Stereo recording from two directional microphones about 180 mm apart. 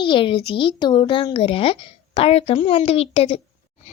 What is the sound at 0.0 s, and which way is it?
Speech, 25° left (ahead or behind).